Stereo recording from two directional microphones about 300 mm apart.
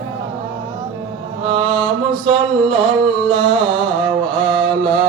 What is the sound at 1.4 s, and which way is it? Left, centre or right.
Mantra, centre.